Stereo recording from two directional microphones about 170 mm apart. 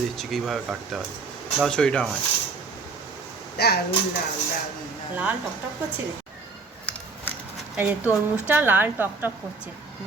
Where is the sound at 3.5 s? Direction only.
70° left (ahead or behind).